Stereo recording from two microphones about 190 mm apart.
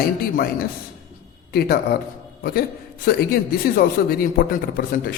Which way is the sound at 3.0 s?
55° left (ahead or behind).